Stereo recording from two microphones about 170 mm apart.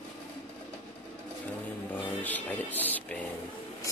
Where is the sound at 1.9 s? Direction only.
10° left (ahead or behind).